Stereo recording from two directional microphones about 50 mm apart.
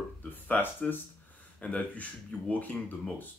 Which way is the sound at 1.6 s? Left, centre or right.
Left.